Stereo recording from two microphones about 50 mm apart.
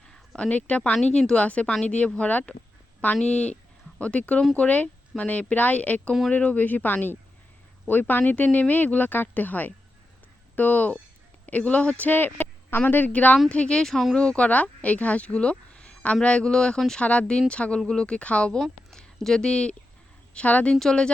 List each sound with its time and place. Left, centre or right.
0.0 s a sound: centre
0.4 s speech: left
17.0 s speech: left
18.6 s speech: centre; by 20.7 s left
20.7 s speech: centre